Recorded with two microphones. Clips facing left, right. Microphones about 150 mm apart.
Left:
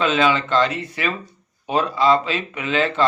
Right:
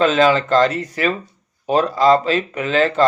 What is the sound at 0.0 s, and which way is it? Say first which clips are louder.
Speech: right 4 dB; 40° right (ahead or behind).